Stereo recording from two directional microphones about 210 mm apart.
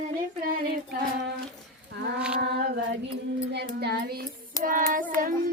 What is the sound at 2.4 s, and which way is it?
Female singing, 55° right (ahead or behind).